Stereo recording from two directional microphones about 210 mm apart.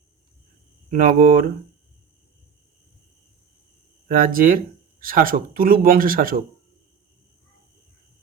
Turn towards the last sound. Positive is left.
turn(degrees=-40)  # may be behind; listen again after turning